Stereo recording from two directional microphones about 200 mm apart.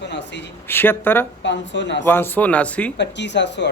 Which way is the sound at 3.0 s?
60° left (ahead or behind).